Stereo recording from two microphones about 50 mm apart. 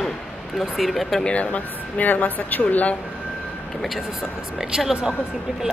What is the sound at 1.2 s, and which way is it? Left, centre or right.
A woman's voice, left.